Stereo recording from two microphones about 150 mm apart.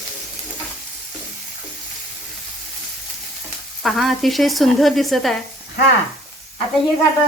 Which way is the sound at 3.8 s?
Centre (ahead or behind).